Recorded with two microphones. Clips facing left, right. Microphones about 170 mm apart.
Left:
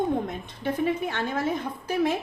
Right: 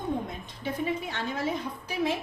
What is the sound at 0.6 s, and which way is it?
A woman's voice, 55° left (ahead or behind).